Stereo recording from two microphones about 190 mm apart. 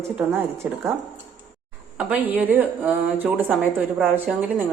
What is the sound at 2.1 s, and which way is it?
Speech, 10° right (ahead or behind).